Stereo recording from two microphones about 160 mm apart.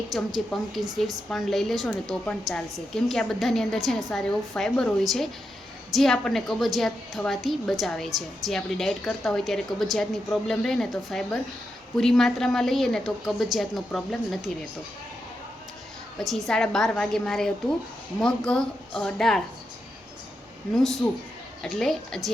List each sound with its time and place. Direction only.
0.1 s a woman's voice: centre (ahead or behind)
16.1 s a woman's voice: centre (ahead or behind)
21.6 s a woman's voice: 5° left (ahead or behind)